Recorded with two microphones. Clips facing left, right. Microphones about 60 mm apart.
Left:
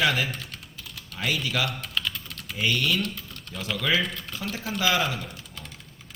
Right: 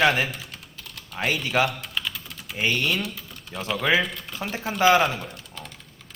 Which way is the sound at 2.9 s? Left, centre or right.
Centre.